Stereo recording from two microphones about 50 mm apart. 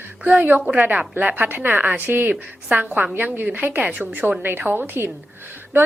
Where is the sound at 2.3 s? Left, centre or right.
Right.